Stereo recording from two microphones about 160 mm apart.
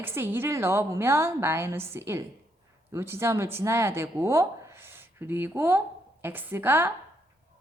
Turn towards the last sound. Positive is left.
turn(degrees=-15)  # may be behind; listen again after turning